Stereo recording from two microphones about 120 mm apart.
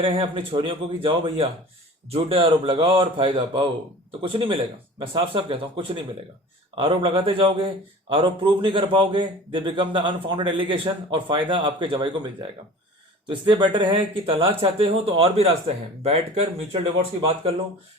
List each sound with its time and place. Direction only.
0.0 s a man's voice: 45° right (ahead or behind)
13.2 s a man's voice: 45° right (ahead or behind)
16.7 s a man's voice: 55° right (ahead or behind)